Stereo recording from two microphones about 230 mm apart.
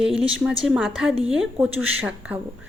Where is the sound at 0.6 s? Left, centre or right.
Centre.